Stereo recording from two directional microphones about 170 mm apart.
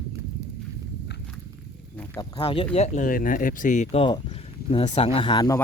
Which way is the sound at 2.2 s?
20° left (ahead or behind).